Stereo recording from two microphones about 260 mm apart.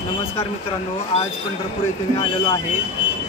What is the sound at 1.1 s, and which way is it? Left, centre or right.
Speech, left.